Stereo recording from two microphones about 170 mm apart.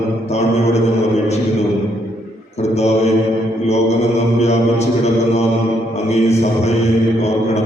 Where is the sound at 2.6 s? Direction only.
40° left (ahead or behind).